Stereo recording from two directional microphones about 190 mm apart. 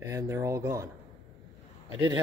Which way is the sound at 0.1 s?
15° right (ahead or behind).